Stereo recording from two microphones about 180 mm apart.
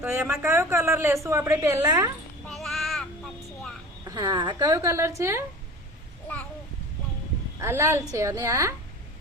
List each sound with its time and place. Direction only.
0.0 s speech: 15° right (ahead or behind)
2.5 s child singing: centre (ahead or behind)
4.0 s speech: 20° right (ahead or behind)
6.2 s a sound: 10° left (ahead or behind)
7.6 s speech: 15° right (ahead or behind)